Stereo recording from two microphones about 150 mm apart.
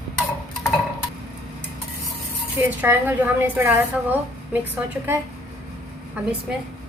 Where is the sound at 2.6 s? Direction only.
15° right (ahead or behind).